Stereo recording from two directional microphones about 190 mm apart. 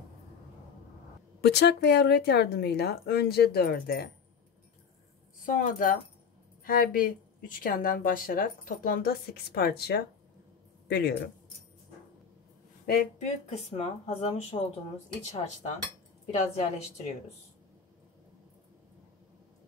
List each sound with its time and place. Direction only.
1.4 s speech: 60° left (ahead or behind)
5.4 s speech: 45° left (ahead or behind); by 11.1 s 60° left (ahead or behind)
12.8 s speech: 45° left (ahead or behind)
16.3 s speech: 35° left (ahead or behind)